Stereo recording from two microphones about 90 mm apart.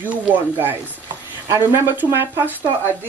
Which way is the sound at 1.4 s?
35° right (ahead or behind).